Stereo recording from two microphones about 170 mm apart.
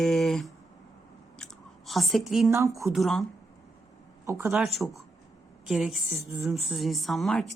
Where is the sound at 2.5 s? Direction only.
20° right (ahead or behind).